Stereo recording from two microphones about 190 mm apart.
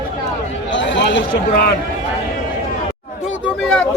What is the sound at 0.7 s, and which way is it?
Speech, 75° left (ahead or behind).